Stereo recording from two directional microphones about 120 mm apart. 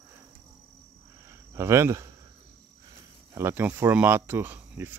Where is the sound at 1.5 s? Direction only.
20° right (ahead or behind).